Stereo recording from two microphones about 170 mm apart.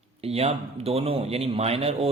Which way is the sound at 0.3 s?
35° right (ahead or behind).